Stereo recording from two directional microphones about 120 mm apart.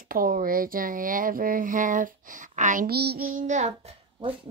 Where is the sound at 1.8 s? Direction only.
90° right.